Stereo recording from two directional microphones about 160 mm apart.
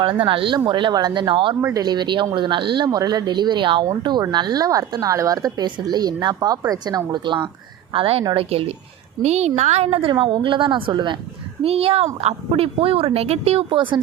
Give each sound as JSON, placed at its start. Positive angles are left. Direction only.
{"t": 0.0, "sound": "speech", "side_deg": -30}
{"t": 8.4, "sound": "speech", "side_deg": -35}